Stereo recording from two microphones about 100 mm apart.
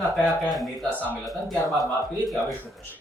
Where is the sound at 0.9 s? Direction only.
15° left (ahead or behind).